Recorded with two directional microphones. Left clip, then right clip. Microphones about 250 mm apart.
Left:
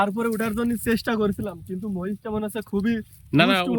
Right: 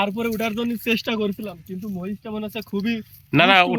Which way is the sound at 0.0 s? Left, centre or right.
Centre.